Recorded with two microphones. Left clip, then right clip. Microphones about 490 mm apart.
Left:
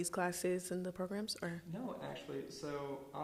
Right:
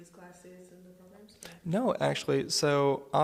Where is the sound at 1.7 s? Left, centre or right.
Right.